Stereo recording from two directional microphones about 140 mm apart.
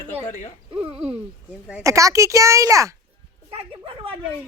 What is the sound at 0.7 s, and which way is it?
Speech, 45° right (ahead or behind).